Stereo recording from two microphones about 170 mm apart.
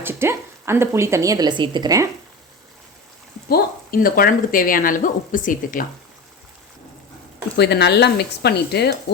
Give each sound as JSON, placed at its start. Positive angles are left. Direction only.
{"t": 0.0, "sound": "speech", "side_deg": -15}
{"t": 3.5, "sound": "speech", "side_deg": 60}
{"t": 7.5, "sound": "speech", "side_deg": 80}